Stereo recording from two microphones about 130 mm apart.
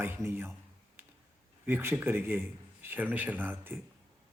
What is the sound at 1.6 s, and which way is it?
Speech, 20° right (ahead or behind).